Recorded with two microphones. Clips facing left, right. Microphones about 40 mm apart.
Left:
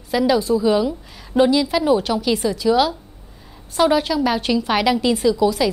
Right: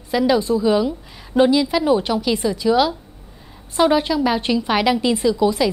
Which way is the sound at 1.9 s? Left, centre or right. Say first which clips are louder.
Even; centre.